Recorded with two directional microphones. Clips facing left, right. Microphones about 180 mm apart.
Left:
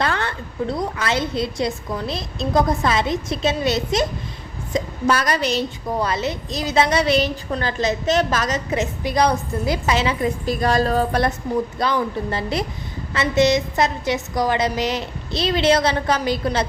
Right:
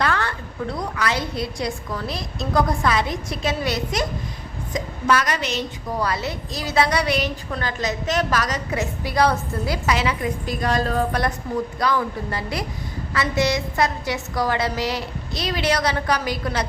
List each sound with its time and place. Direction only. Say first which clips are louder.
0.0 s a woman's voice: even; 25° left (ahead or behind)
6.0 s a woman's voice: left 2 dB; 20° left (ahead or behind)